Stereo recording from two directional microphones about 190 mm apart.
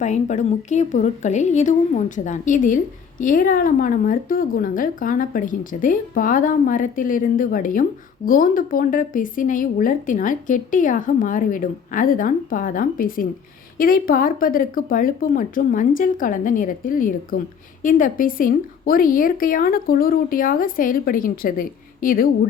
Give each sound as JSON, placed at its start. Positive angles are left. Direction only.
{"t": 0.0, "sound": "a woman's voice", "side_deg": 40}